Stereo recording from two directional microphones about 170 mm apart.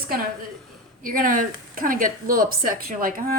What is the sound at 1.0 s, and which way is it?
A woman's voice, 55° right (ahead or behind).